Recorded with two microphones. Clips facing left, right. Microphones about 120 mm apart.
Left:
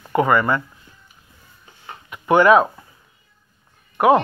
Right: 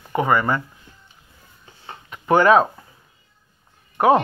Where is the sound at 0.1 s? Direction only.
25° right (ahead or behind).